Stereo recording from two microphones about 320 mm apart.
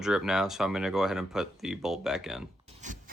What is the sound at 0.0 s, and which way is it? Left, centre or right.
Speech, centre.